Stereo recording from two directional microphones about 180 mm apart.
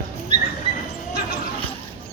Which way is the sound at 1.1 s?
55° left (ahead or behind).